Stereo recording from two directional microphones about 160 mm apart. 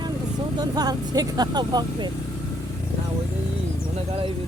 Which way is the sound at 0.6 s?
25° right (ahead or behind).